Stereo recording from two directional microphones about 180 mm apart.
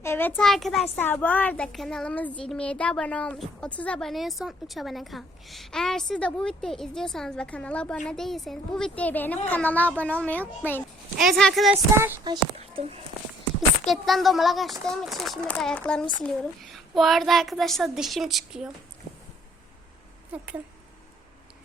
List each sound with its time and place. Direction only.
0.0 s a child's voice: 10° left (ahead or behind)
12.5 s a sound: 35° right (ahead or behind)
13.8 s a woman's voice: centre (ahead or behind)
20.3 s speech: 5° right (ahead or behind)